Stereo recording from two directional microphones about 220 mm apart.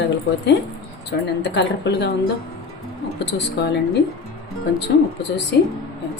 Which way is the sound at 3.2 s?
50° left (ahead or behind).